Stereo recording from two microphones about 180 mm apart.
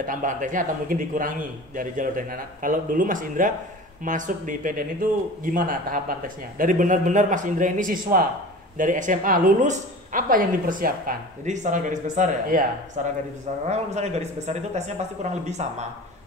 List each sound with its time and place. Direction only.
0.0 s a woman's voice: 50° right (ahead or behind)